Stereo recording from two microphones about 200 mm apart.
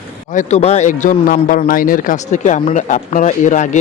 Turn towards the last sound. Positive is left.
turn(degrees=40)  # may be behind; listen again after turning